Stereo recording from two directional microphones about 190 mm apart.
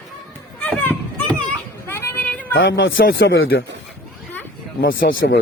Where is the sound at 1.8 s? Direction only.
10° left (ahead or behind).